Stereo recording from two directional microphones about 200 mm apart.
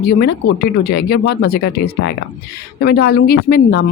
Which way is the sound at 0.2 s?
50° left (ahead or behind).